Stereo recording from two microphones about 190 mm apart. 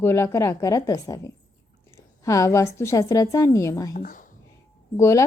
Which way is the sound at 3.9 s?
45° left (ahead or behind).